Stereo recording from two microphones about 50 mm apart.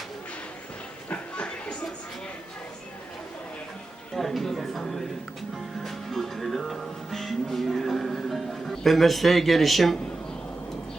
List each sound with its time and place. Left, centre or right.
1.1 s a sound: left
4.1 s speech: centre
5.8 s music: centre